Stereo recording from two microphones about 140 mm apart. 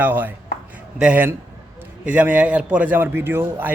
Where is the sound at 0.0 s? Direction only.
15° right (ahead or behind).